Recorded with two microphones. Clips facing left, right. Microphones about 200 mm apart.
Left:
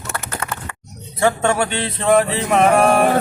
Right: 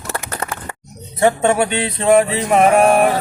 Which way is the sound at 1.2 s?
20° right (ahead or behind).